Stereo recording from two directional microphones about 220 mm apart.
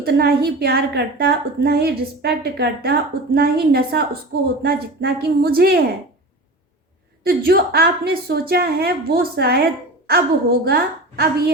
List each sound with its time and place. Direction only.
0.0 s a woman's voice: 45° right (ahead or behind)
7.3 s a woman's voice: 45° right (ahead or behind)